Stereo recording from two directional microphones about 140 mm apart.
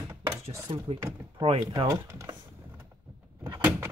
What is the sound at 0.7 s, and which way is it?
Speech, 40° right (ahead or behind).